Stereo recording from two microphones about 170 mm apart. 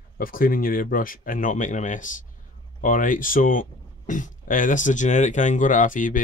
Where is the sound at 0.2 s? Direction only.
55° left (ahead or behind).